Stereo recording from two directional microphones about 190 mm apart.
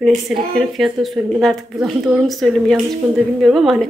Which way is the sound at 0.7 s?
Centre (ahead or behind).